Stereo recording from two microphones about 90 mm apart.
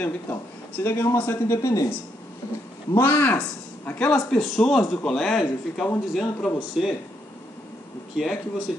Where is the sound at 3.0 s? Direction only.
20° left (ahead or behind).